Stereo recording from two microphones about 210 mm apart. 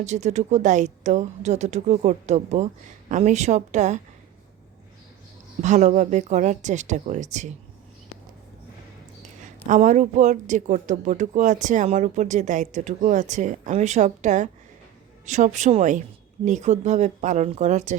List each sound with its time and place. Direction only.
0.0 s speech: 35° right (ahead or behind)
5.6 s speech: 35° right (ahead or behind)
9.6 s speech: 35° right (ahead or behind)